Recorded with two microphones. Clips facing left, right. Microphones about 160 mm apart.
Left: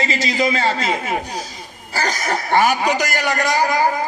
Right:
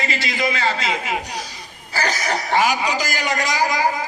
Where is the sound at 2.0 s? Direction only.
50° left (ahead or behind).